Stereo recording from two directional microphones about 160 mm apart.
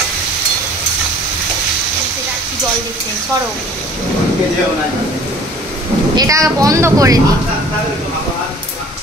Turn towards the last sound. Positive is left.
turn(degrees=-20)  # may be behind; listen again after turning